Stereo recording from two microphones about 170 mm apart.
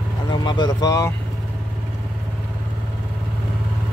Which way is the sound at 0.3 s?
25° left (ahead or behind).